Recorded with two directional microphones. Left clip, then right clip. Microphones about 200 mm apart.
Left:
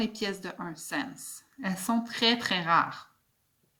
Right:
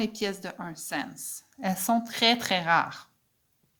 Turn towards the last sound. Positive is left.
turn(degrees=-50)  # may be behind; listen again after turning